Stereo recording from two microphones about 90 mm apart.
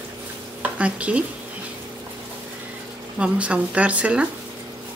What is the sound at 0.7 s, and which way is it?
Speech, 15° right (ahead or behind).